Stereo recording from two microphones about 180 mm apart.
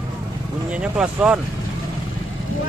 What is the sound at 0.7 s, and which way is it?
Speech, 5° right (ahead or behind).